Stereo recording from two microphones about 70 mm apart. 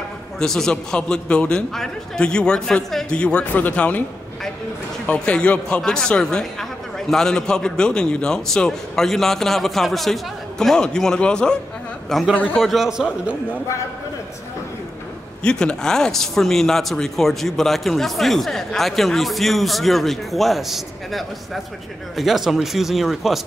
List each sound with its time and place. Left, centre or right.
0.4 s a man's voice: centre
5.0 s a man's voice: centre
12.1 s speech: centre
15.4 s speech: centre